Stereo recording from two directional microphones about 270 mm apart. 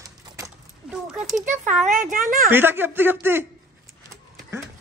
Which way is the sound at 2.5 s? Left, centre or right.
Centre.